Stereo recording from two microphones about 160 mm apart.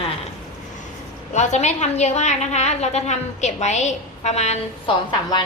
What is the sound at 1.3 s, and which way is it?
A woman's voice, 45° left (ahead or behind).